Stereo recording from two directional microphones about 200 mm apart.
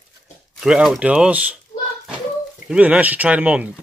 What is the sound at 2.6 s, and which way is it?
Speech, 5° right (ahead or behind).